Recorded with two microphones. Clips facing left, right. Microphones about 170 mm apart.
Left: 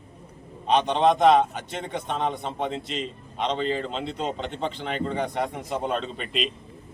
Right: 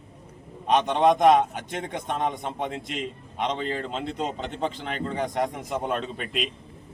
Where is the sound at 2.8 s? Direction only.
55° right (ahead or behind).